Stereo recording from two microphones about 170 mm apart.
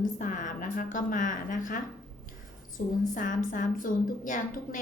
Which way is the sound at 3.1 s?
50° left (ahead or behind).